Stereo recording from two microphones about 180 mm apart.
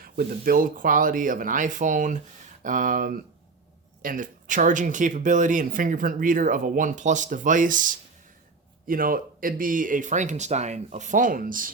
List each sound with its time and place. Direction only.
0.0 s speech: 50° right (ahead or behind)